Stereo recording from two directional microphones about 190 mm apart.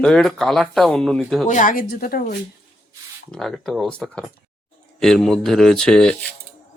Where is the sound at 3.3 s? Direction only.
Centre (ahead or behind).